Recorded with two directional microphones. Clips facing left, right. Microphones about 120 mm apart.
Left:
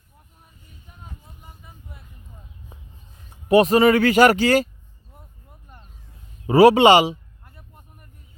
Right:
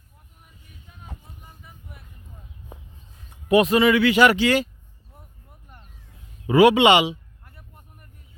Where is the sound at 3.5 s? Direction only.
35° left (ahead or behind).